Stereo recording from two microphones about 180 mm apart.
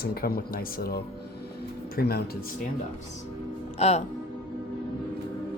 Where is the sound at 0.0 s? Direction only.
55° left (ahead or behind).